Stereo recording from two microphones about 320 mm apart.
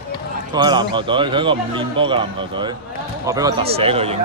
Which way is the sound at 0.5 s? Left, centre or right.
Centre.